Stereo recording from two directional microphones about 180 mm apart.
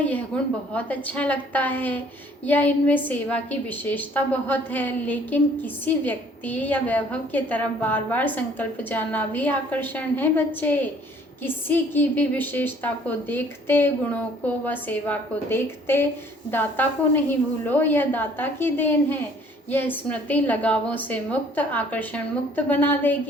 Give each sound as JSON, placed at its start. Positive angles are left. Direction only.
{"t": 0.3, "sound": "a woman's voice", "side_deg": 5}